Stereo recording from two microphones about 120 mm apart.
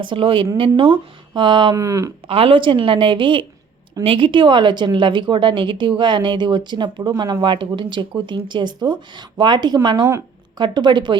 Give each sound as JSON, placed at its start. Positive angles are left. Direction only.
{"t": 0.0, "sound": "speech", "side_deg": -45}
{"t": 1.7, "sound": "speech", "side_deg": -25}
{"t": 2.2, "sound": "a woman's voice", "side_deg": -50}